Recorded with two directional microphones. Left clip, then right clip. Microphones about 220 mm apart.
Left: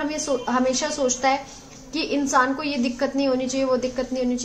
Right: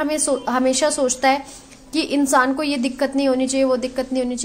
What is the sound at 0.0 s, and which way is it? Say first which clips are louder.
A woman's voice: right 4 dB; 50° right (ahead or behind).